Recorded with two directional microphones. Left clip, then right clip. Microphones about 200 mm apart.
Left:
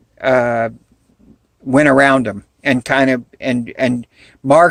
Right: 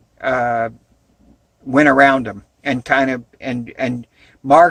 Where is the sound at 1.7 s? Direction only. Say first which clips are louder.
Left 1 dB; 40° left (ahead or behind).